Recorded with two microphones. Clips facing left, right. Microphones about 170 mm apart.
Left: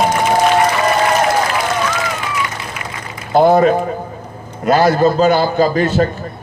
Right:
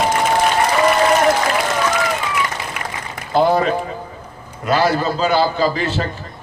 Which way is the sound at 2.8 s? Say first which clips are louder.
Even; 60° right (ahead or behind).